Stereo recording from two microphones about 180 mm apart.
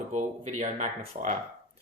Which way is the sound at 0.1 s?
40° right (ahead or behind).